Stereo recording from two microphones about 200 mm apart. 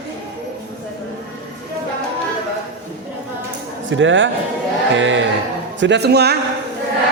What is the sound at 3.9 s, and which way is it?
A man's voice, 70° right (ahead or behind).